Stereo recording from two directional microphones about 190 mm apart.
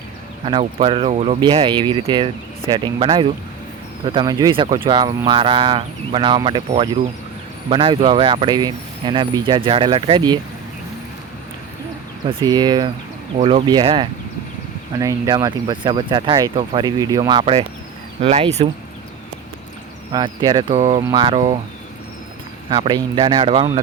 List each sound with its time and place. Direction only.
0.4 s speech: 30° right (ahead or behind)
12.3 s speech: 25° right (ahead or behind)
20.1 s speech: 20° right (ahead or behind)
22.7 s speech: 25° right (ahead or behind)